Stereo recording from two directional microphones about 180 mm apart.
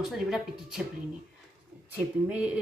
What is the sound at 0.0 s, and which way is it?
Speech, centre (ahead or behind).